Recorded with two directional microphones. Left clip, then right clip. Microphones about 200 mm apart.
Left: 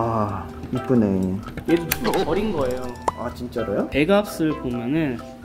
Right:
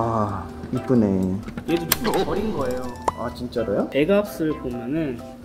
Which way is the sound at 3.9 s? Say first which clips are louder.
Left 2 dB; 30° left (ahead or behind).